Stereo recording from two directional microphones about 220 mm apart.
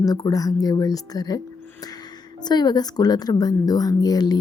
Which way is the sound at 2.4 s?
20° left (ahead or behind).